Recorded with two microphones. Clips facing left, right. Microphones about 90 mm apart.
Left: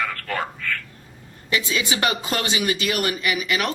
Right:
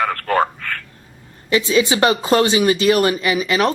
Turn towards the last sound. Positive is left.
turn(degrees=-30)  # may be behind; listen again after turning